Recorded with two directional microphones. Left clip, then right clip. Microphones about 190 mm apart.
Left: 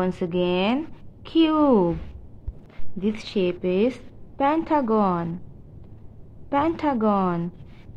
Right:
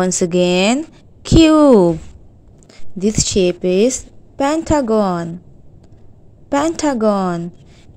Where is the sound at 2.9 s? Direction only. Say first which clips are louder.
Right 10 dB; 35° right (ahead or behind).